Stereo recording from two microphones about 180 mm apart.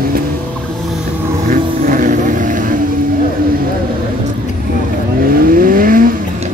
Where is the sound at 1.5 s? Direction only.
50° right (ahead or behind).